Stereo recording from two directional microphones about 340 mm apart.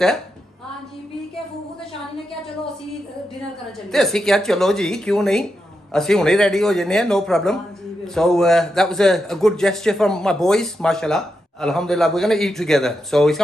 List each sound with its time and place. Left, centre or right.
3.9 s a man's voice: centre